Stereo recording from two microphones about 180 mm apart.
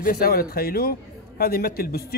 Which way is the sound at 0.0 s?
55° left (ahead or behind).